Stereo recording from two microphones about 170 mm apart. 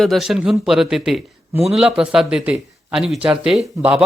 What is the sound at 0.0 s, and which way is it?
A man's voice, centre (ahead or behind).